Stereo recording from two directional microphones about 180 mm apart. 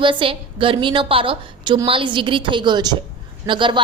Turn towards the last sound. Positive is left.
turn(degrees=-25)  # may be behind; listen again after turning